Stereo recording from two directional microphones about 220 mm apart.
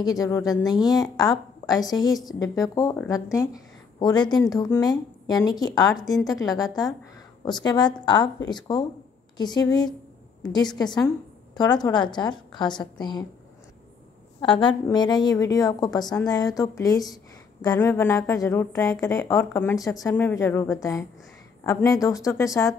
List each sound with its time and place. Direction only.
0.0 s a woman's voice: 15° left (ahead or behind)
14.4 s a woman's voice: 20° left (ahead or behind)